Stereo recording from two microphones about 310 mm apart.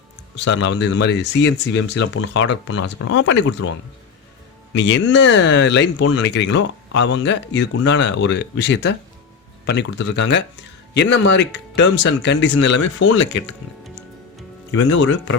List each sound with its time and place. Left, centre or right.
0.3 s speech: left
4.7 s speech: left
13.0 s speech: left
14.7 s speech: left